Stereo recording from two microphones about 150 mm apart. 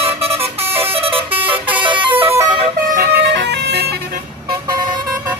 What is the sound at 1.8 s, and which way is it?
Vehicle, 35° right (ahead or behind).